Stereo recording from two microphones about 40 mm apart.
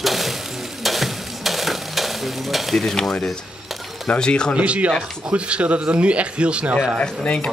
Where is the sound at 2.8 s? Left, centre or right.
Centre.